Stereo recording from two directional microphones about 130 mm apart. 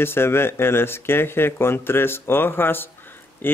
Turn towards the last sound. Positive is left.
turn(degrees=15)  # may be behind; listen again after turning